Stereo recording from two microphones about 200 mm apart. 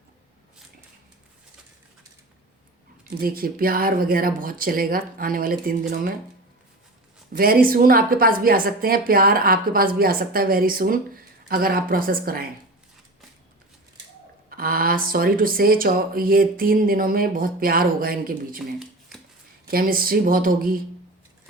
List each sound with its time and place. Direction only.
3.2 s a woman's voice: 45° right (ahead or behind)
7.3 s a woman's voice: 50° right (ahead or behind)
14.5 s a woman's voice: 45° right (ahead or behind)
18.8 s shuffling cards: centre (ahead or behind)
19.6 s a woman's voice: 45° right (ahead or behind)